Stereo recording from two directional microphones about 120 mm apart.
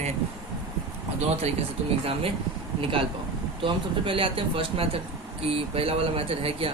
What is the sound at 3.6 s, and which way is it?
Speech, 45° right (ahead or behind).